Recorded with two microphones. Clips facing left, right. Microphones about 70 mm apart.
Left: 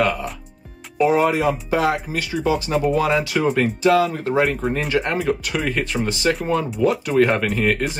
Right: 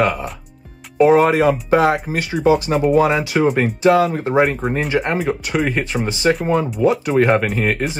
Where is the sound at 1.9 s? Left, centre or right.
Right.